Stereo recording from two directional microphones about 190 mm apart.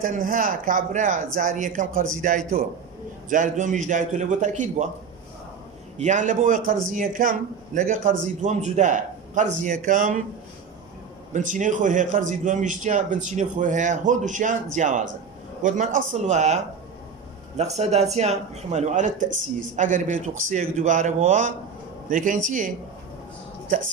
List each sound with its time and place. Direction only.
0.0 s a man's voice: 45° right (ahead or behind)
6.0 s a man's voice: 40° right (ahead or behind)
11.3 s a man's voice: 40° right (ahead or behind)
17.6 s a man's voice: 35° right (ahead or behind)